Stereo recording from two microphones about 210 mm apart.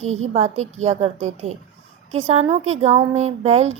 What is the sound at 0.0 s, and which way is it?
A woman's voice, 30° right (ahead or behind).